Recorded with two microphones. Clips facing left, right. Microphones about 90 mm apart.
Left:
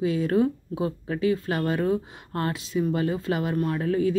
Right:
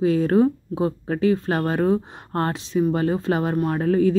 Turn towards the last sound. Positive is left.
turn(degrees=-40)  # may be behind; listen again after turning